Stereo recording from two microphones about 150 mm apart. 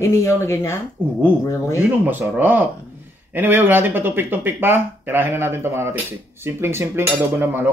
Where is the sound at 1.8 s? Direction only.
10° right (ahead or behind).